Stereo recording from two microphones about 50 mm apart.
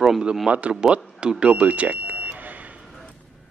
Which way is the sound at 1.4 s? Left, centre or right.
Right.